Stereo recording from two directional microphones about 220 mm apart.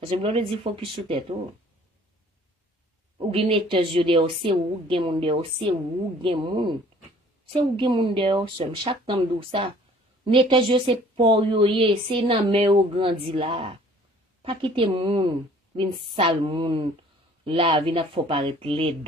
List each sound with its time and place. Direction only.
0.1 s speech: 25° right (ahead or behind)
3.2 s speech: 25° right (ahead or behind)